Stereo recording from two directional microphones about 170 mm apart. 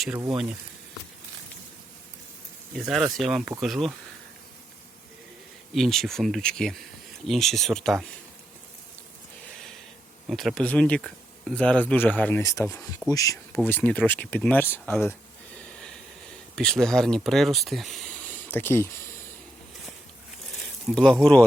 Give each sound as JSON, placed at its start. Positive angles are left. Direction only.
{"t": 2.7, "sound": "speech", "side_deg": 0}
{"t": 5.7, "sound": "speech", "side_deg": 0}
{"t": 10.2, "sound": "speech", "side_deg": 0}
{"t": 16.6, "sound": "speech", "side_deg": 5}
{"t": 20.8, "sound": "speech", "side_deg": 5}